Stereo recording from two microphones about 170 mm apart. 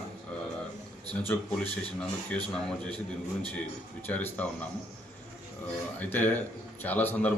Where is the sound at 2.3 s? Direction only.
5° left (ahead or behind).